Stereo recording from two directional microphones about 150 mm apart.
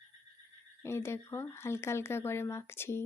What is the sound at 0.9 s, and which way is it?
Speech, 15° left (ahead or behind).